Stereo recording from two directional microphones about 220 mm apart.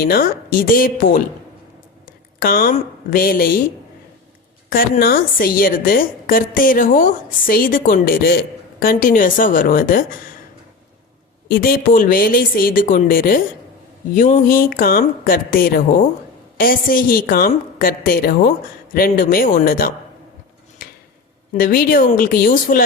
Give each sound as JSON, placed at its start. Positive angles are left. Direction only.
{"t": 0.0, "sound": "a woman's voice", "side_deg": 45}
{"t": 4.7, "sound": "a woman's voice", "side_deg": 40}
{"t": 11.4, "sound": "a woman's voice", "side_deg": 45}
{"t": 20.8, "sound": "a sound", "side_deg": 40}
{"t": 21.5, "sound": "a woman's voice", "side_deg": 40}